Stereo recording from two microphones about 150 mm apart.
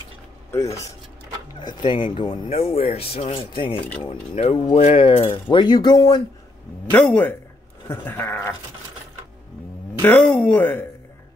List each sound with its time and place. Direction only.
0.5 s speech: 20° left (ahead or behind); by 3.8 s 35° left (ahead or behind)
4.4 s speech: 45° left (ahead or behind); by 6.2 s 25° left (ahead or behind)
6.9 s speech: 10° left (ahead or behind)
10.0 s speech: 5° left (ahead or behind)